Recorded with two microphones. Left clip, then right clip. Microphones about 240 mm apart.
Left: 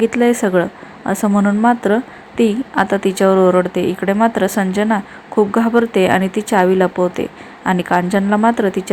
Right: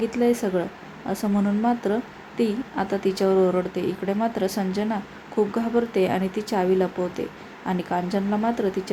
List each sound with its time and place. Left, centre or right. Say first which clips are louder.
0.0 s a woman's voice: left 8 dB; centre